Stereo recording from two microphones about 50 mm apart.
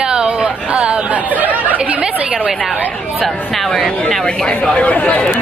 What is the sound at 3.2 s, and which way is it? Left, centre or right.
Speech, centre.